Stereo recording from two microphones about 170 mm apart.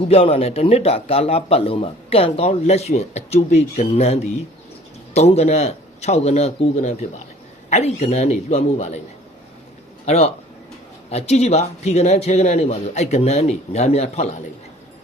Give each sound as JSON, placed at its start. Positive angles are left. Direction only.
{"t": 0.0, "sound": "a man's voice", "side_deg": 35}
{"t": 10.1, "sound": "a man's voice", "side_deg": 40}